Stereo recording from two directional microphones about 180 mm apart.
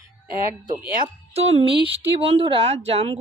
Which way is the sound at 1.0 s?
35° right (ahead or behind).